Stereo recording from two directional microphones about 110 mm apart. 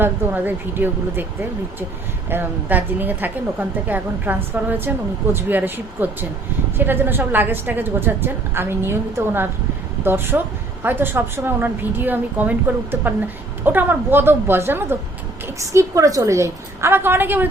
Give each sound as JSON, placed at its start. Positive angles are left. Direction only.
{"t": 0.0, "sound": "a woman's voice", "side_deg": -15}
{"t": 2.3, "sound": "a woman's voice", "side_deg": -15}